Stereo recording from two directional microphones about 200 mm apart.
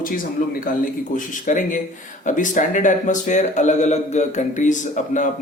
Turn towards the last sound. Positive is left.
turn(degrees=40)  # may be behind; listen again after turning